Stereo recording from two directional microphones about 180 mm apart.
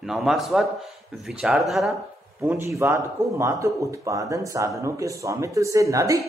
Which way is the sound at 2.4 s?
10° right (ahead or behind).